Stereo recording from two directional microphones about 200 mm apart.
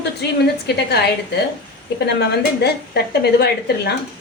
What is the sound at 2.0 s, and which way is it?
A woman's voice, 55° left (ahead or behind).